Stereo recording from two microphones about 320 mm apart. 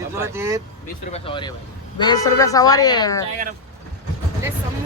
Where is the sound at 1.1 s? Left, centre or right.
Centre.